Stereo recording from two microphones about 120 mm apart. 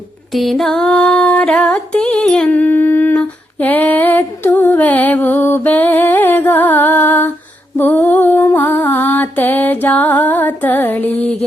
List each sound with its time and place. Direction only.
0.3 s music: centre (ahead or behind)
7.8 s a sound: 15° left (ahead or behind)
8.4 s music: 20° left (ahead or behind)